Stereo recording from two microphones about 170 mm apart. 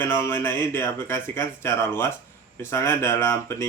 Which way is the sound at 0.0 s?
15° left (ahead or behind).